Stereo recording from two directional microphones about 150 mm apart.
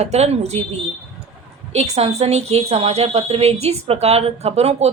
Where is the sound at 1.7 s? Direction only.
45° right (ahead or behind).